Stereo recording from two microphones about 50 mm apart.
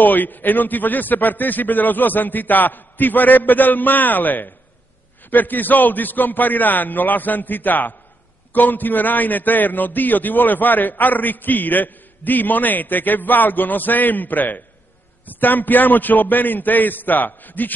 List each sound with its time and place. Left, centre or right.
0.0 s a man's voice: left